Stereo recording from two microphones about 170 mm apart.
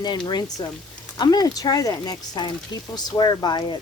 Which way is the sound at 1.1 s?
25° left (ahead or behind).